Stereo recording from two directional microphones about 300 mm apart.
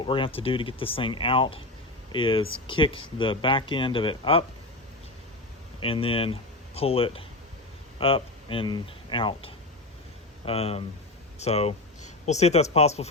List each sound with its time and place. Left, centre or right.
0.0 s speech: centre
5.8 s speech: centre